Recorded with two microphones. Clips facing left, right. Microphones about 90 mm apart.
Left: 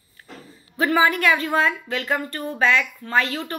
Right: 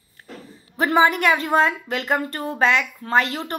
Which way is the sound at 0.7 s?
25° right (ahead or behind).